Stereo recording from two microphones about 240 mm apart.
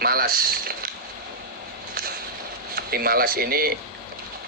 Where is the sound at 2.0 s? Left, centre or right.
Right.